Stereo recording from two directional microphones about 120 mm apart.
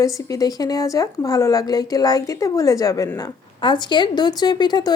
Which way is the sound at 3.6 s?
40° left (ahead or behind).